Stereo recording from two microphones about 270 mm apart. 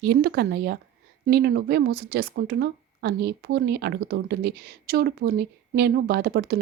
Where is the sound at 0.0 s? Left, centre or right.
Right.